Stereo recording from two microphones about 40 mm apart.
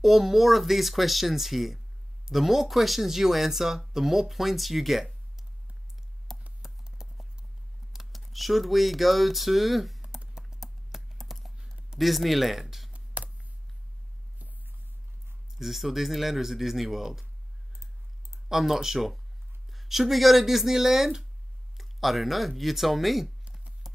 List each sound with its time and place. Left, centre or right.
0.0 s speech: centre
6.3 s computer keyboard: centre
6.6 s clip-clop: centre
7.9 s speech: centre
10.4 s computer keyboard: centre
11.2 s clip-clop: centre
11.6 s a sound: centre
12.0 s speech: centre
12.9 s a sound: right
15.5 s speech: centre
18.5 s speech: centre